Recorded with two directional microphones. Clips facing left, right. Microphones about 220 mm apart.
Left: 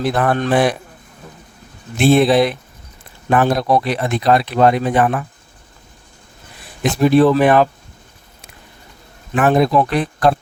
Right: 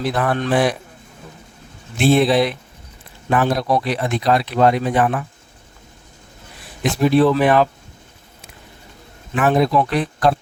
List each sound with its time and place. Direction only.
0.0 s speech: 50° left (ahead or behind)
2.0 s speech: 50° left (ahead or behind)
6.8 s speech: 45° left (ahead or behind)
9.3 s speech: 50° left (ahead or behind)